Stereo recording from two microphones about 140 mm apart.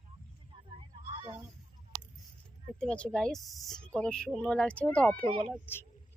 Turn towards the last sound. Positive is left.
turn(degrees=10)  # may be behind; listen again after turning